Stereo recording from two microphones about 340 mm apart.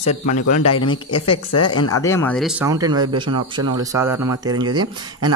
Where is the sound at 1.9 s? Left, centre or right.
Centre.